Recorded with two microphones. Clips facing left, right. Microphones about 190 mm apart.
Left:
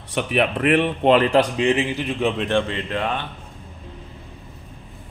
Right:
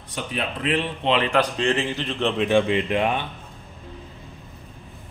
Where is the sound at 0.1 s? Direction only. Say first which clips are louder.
Left 8 dB; 70° left (ahead or behind); by 1.3 s 45° left (ahead or behind).